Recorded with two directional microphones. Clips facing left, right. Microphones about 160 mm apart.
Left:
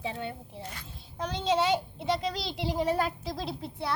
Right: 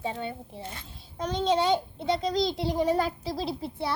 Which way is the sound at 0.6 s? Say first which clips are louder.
Right 1 dB; 25° right (ahead or behind).